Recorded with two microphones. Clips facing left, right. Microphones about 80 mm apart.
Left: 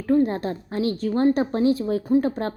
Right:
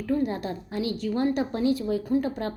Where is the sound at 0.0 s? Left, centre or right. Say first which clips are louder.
Left 6 dB; left.